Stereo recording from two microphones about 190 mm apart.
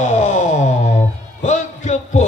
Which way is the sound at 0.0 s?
40° left (ahead or behind).